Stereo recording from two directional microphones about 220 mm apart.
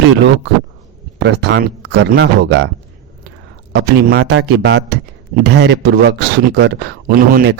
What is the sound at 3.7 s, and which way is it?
Speech, 50° right (ahead or behind).